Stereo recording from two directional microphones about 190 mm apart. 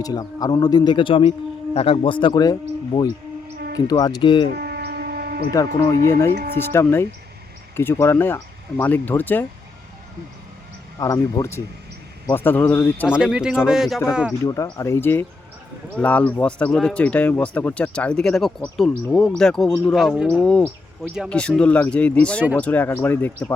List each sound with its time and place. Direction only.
0.0 s speech: 20° left (ahead or behind)
4.5 s a sound: 60° right (ahead or behind)
5.5 s speech: 15° left (ahead or behind)
6.3 s speech: 55° right (ahead or behind)
6.6 s speech: 10° left (ahead or behind)
11.0 s speech: 15° left (ahead or behind)
13.1 s speech: 5° right (ahead or behind)
14.4 s speech: 15° left (ahead or behind)